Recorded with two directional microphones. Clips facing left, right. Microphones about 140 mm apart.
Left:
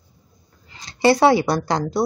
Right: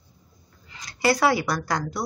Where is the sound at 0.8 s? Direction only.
25° left (ahead or behind).